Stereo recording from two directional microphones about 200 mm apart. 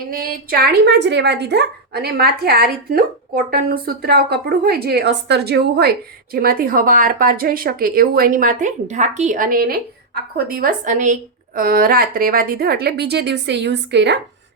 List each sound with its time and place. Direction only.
0.1 s speech: 45° right (ahead or behind)